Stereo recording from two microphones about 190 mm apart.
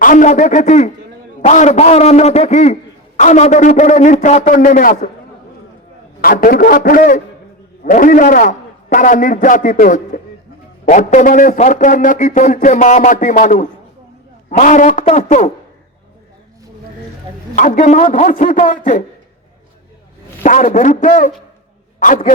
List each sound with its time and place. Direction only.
0.0 s a man's voice: 45° left (ahead or behind)
6.2 s a man's voice: 50° left (ahead or behind)
17.5 s a man's voice: 40° left (ahead or behind)
20.4 s a man's voice: 40° left (ahead or behind)